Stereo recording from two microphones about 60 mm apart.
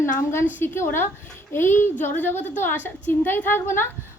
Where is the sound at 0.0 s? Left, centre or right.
Left.